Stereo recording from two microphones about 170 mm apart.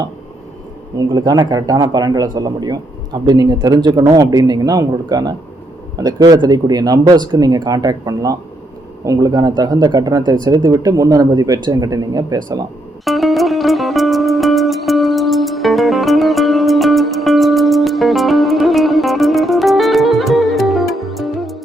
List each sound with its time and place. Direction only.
0.9 s speech: 20° right (ahead or behind)
13.1 s music: centre (ahead or behind)